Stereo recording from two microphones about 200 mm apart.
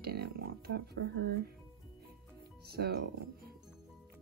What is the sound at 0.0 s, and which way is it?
Speech, 50° right (ahead or behind).